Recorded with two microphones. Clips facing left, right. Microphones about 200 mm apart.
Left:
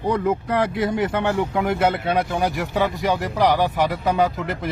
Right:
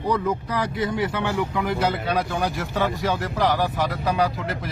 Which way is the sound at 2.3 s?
15° left (ahead or behind).